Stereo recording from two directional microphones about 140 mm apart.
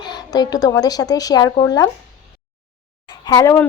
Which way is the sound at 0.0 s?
30° left (ahead or behind).